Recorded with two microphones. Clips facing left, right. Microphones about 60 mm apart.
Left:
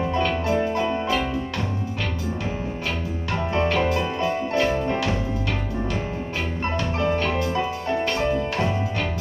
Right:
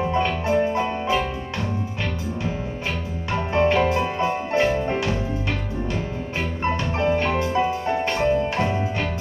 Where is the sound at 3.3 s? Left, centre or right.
Right.